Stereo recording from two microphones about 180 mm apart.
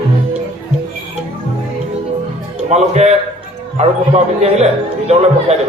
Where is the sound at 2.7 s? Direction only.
40° right (ahead or behind).